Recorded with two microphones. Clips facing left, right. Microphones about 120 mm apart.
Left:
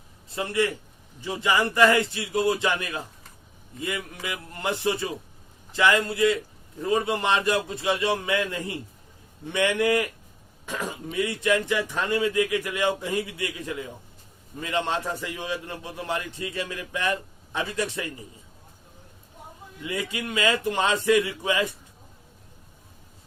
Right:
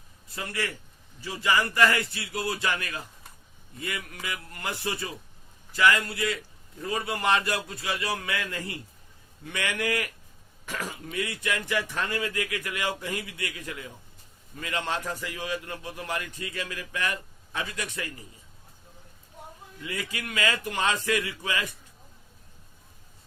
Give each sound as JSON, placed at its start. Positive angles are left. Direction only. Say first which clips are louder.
{"t": 0.3, "sound": "a man's voice", "louder": "left 8 dB", "side_deg": 25}
{"t": 14.6, "sound": "a man's voice", "louder": "left 4 dB", "side_deg": 25}
{"t": 19.8, "sound": "a man's voice", "louder": "left 5 dB", "side_deg": 25}